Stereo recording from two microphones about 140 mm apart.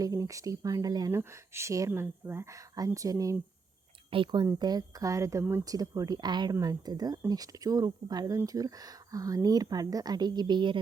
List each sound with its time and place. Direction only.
0.0 s speech: 25° right (ahead or behind)
4.1 s speech: 35° right (ahead or behind)